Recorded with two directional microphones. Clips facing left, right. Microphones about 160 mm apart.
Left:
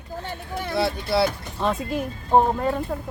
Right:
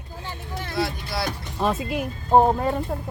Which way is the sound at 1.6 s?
5° right (ahead or behind).